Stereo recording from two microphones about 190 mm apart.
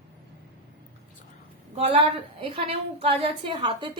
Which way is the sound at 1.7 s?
30° right (ahead or behind).